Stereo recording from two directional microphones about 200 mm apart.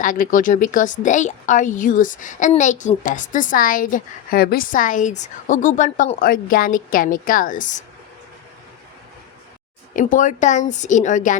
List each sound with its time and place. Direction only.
0.0 s speech: 40° left (ahead or behind)
9.9 s speech: 40° left (ahead or behind)